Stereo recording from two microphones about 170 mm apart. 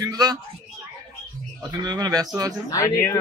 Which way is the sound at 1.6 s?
25° right (ahead or behind).